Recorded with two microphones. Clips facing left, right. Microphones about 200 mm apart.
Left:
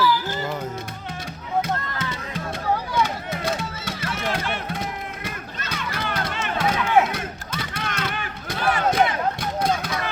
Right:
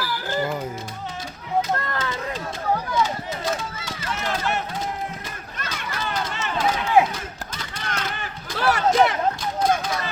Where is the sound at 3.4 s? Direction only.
60° left (ahead or behind).